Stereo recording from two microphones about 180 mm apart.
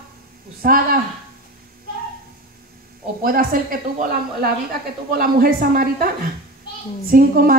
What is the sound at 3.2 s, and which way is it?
A woman's voice, 55° right (ahead or behind).